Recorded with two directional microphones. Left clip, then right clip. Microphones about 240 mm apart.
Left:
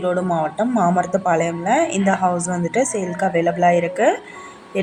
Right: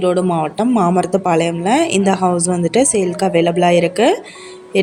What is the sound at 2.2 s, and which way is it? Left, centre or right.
Speech, right.